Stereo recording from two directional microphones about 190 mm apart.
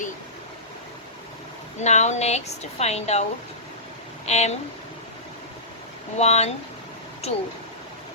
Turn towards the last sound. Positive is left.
turn(degrees=35)  # may be behind; listen again after turning